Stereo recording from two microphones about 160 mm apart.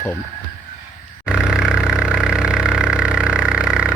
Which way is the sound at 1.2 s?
5° right (ahead or behind).